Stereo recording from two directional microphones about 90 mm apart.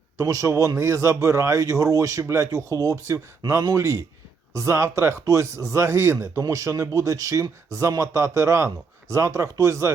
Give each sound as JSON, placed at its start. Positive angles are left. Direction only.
{"t": 0.2, "sound": "speech", "side_deg": -35}